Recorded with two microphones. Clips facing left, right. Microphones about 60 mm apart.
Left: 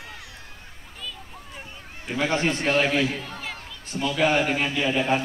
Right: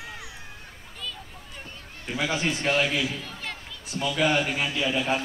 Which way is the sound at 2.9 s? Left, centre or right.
Left.